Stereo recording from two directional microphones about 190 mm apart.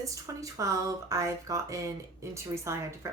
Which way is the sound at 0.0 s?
15° right (ahead or behind).